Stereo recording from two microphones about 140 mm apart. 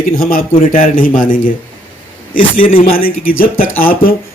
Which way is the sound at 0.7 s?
80° left.